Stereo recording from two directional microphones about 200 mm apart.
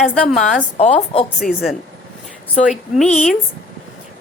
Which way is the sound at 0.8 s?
30° left (ahead or behind).